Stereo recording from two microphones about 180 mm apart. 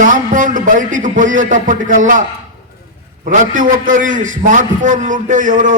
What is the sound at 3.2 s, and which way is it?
A man's voice, 45° right (ahead or behind).